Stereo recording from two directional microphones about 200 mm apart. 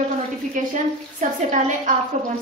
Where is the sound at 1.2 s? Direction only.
40° right (ahead or behind).